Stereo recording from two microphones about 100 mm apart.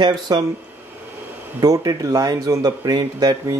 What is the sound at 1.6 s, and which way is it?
Speech, 40° right (ahead or behind).